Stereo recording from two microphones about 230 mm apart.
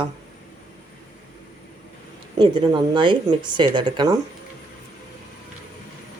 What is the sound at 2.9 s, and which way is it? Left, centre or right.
Speech, right.